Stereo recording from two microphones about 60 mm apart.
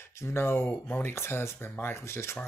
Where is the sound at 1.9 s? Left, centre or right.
Left.